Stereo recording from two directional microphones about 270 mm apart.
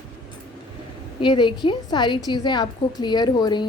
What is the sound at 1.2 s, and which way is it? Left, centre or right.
A woman's voice, centre.